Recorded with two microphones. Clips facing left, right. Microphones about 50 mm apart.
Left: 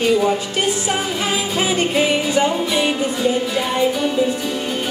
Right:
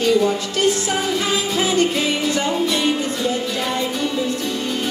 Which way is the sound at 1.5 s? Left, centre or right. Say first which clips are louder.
Left 1 dB; centre.